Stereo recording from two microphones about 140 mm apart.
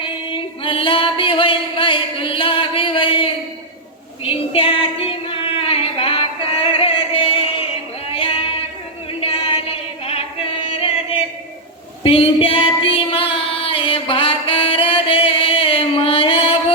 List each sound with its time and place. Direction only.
0.0 s singing: 40° left (ahead or behind)
4.2 s a sound: 40° left (ahead or behind)
8.1 s female singing: 40° left (ahead or behind)
9.2 s chant: 40° left (ahead or behind)
12.0 s music: 40° left (ahead or behind)